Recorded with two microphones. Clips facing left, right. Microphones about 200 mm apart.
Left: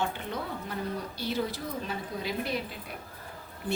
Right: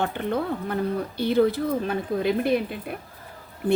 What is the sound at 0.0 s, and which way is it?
Speech, 55° right (ahead or behind).